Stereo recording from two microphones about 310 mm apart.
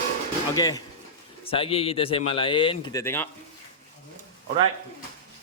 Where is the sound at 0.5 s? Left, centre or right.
Centre.